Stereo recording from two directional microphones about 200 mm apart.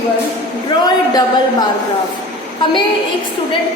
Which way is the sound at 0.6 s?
20° left (ahead or behind).